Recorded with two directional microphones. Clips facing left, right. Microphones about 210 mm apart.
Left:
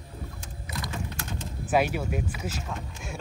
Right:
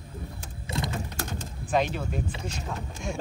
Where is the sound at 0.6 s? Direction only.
25° right (ahead or behind).